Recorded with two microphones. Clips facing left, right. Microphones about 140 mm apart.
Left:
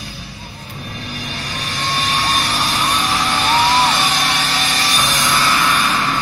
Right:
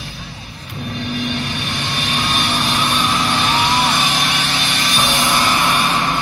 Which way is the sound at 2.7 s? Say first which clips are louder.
Right 1 dB; 40° left (ahead or behind).